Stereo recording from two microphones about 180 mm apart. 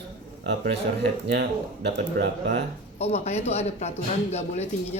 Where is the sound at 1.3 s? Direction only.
65° right (ahead or behind).